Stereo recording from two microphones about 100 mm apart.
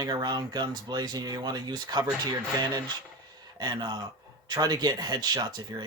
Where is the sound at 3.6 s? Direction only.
45° right (ahead or behind).